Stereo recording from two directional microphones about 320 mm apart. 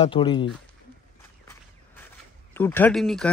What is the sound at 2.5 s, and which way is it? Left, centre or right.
Speech, centre.